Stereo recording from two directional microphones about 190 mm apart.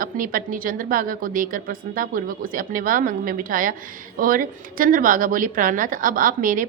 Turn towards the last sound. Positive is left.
turn(degrees=-45)  # may be behind; listen again after turning